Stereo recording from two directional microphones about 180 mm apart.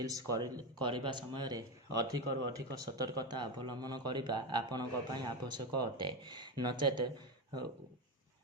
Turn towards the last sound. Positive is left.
turn(degrees=-25)  # may be behind; listen again after turning